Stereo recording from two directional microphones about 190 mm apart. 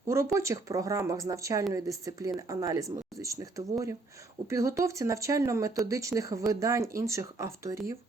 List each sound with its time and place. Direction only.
0.1 s speech: 15° right (ahead or behind)